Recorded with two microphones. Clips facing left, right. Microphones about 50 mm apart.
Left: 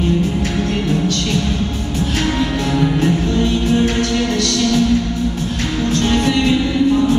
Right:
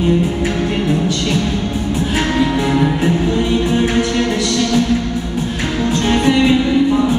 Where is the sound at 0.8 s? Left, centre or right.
Centre.